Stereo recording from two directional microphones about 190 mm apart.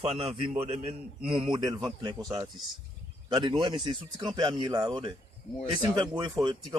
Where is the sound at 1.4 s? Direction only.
20° right (ahead or behind).